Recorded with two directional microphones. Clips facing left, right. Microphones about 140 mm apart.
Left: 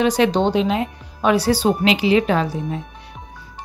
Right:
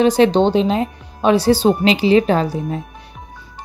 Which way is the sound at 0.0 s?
30° right (ahead or behind).